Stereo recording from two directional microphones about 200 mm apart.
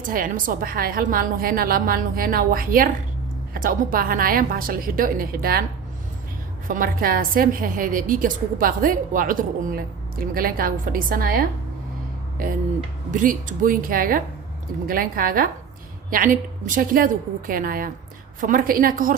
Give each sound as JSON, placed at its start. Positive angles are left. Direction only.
{"t": 0.0, "sound": "a woman's voice", "side_deg": -45}
{"t": 6.7, "sound": "a woman's voice", "side_deg": -45}
{"t": 13.1, "sound": "a woman's voice", "side_deg": -40}